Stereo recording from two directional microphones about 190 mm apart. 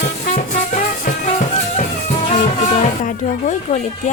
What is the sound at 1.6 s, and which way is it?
Speech, 40° left (ahead or behind).